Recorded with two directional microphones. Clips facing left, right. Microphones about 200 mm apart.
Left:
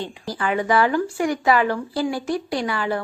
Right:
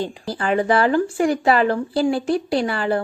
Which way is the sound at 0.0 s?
35° right (ahead or behind).